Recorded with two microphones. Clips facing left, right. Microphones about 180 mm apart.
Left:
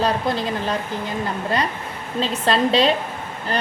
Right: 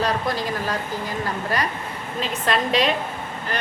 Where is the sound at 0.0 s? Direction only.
25° left (ahead or behind).